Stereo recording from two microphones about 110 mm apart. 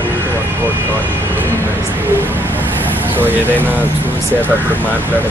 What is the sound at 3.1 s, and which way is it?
Speech, 15° right (ahead or behind).